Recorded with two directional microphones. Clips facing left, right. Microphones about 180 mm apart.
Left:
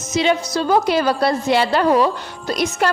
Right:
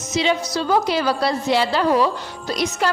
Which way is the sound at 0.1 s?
50° left (ahead or behind).